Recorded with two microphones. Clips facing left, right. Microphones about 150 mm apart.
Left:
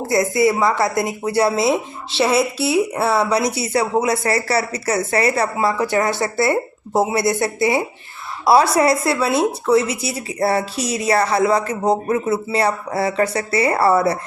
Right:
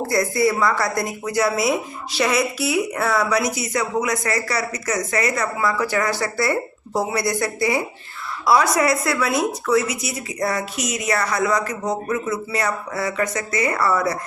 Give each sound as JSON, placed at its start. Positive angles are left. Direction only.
{"t": 0.1, "sound": "a woman's voice", "side_deg": 20}